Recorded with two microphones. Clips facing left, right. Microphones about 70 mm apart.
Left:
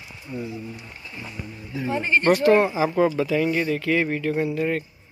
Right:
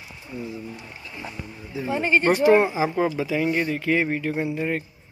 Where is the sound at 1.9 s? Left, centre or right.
Centre.